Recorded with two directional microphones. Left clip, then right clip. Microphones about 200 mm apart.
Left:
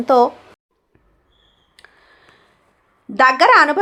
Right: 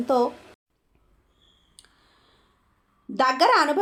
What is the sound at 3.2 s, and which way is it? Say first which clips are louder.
Speech: left 8 dB; 15° left (ahead or behind).